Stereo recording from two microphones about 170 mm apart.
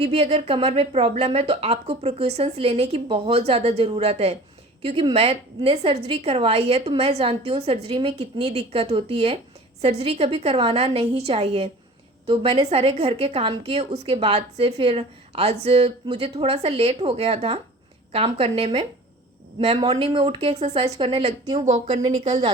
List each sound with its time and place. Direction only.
0.0 s a woman's voice: 40° right (ahead or behind)